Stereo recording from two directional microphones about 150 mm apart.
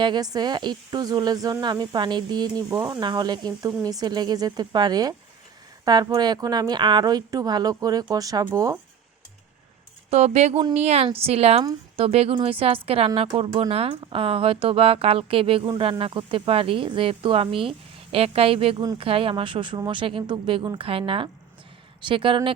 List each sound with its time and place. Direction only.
0.0 s speech: 30° right (ahead or behind)
10.1 s a woman's voice: 45° right (ahead or behind)
22.0 s speech: 35° right (ahead or behind)